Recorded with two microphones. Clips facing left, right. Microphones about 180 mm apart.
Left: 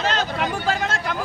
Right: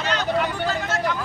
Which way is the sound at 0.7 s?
75° left (ahead or behind).